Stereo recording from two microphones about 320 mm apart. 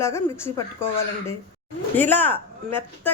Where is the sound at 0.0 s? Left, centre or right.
Centre.